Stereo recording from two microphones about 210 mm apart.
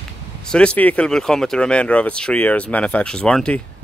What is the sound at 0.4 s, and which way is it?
Speech, 5° left (ahead or behind).